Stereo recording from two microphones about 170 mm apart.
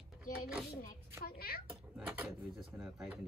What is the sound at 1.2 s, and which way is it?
Speech, 65° left (ahead or behind).